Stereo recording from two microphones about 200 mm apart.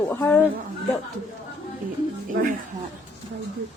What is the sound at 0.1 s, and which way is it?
Speech, 10° left (ahead or behind).